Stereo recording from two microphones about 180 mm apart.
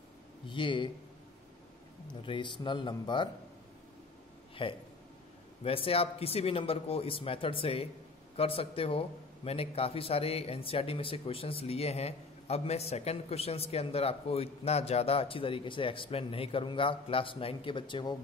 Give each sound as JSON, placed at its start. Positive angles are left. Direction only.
{"t": 0.5, "sound": "speech", "side_deg": 25}
{"t": 2.2, "sound": "speech", "side_deg": 25}
{"t": 4.6, "sound": "a man's voice", "side_deg": 30}